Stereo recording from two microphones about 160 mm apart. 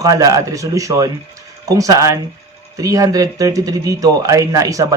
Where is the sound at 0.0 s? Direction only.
20° right (ahead or behind).